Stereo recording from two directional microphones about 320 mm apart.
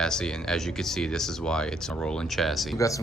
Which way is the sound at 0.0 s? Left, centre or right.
Centre.